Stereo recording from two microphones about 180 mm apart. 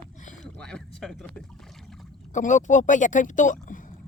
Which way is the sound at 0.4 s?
5° left (ahead or behind).